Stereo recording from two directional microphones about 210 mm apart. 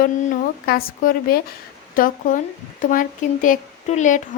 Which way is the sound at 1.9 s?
40° left (ahead or behind).